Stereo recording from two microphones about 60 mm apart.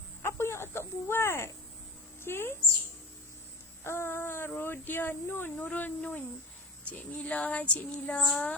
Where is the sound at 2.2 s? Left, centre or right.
Left.